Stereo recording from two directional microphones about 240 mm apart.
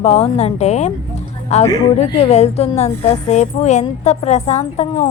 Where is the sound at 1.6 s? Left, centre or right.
Centre.